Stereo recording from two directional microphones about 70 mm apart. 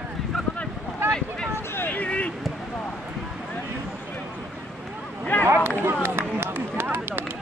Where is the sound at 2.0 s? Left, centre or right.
Centre.